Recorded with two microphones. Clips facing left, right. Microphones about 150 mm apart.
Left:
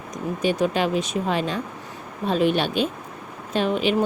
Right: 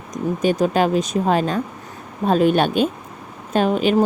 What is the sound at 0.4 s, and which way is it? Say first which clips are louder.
Speech: right 4 dB; 45° right (ahead or behind).